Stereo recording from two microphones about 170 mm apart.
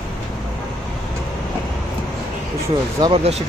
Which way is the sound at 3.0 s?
35° right (ahead or behind).